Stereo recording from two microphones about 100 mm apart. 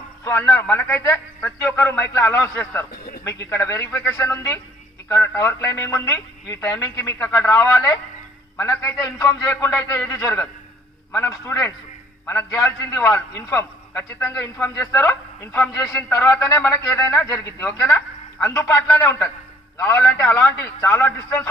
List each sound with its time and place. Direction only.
0.4 s a man's voice: 15° left (ahead or behind)
18.5 s a man's voice: 30° left (ahead or behind); by 20.3 s 15° left (ahead or behind)
20.3 s a man's voice: 25° left (ahead or behind)